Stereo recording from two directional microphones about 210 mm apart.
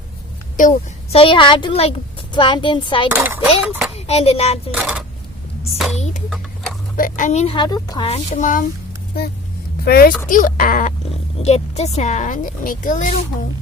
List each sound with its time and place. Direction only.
1.1 s a woman's voice: 25° left (ahead or behind)
3.1 s dishes: 10° right (ahead or behind)
3.9 s speech: 30° left (ahead or behind)
4.7 s speech: centre (ahead or behind)
6.9 s a woman's voice: 40° left (ahead or behind)
9.2 s a child's voice: 50° left (ahead or behind)